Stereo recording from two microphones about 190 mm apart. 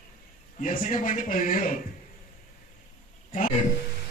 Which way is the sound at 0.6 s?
45° left (ahead or behind).